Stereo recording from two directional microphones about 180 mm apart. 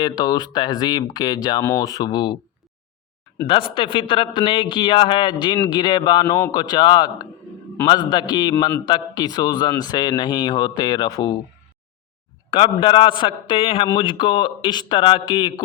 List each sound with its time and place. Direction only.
0.0 s a man's voice: 20° left (ahead or behind)
3.4 s a man's voice: 30° left (ahead or behind)
12.5 s a man's voice: 30° left (ahead or behind)